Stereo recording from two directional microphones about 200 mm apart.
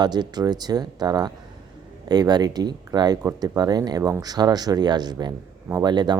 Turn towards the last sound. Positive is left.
turn(degrees=-20)  # may be behind; listen again after turning